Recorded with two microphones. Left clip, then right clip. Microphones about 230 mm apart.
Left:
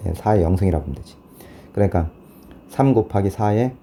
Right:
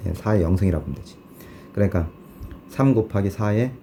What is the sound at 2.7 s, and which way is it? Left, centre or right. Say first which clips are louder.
Speech: left 3 dB; centre.